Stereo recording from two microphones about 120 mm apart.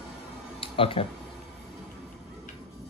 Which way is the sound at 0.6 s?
50° left (ahead or behind).